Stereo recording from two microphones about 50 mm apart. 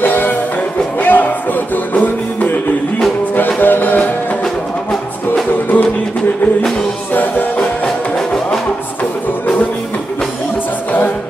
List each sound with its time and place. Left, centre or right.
0.0 s music: left
3.3 s music: left